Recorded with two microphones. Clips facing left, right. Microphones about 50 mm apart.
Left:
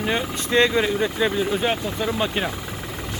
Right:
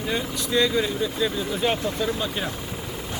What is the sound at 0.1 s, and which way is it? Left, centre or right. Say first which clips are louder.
Speech: left 2 dB; left.